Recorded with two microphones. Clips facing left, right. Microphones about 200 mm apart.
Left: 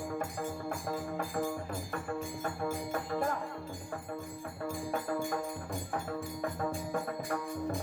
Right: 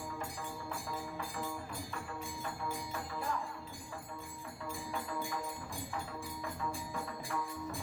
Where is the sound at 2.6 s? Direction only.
50° left (ahead or behind).